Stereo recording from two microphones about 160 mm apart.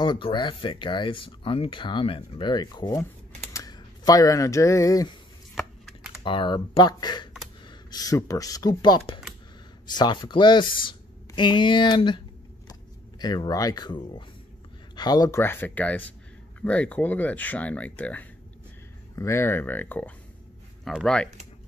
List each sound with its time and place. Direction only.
0.0 s speech: 30° left (ahead or behind)
5.5 s a sound: centre (ahead or behind)
6.2 s speech: 30° left (ahead or behind)
13.2 s speech: 25° left (ahead or behind); by 21.3 s 5° left (ahead or behind)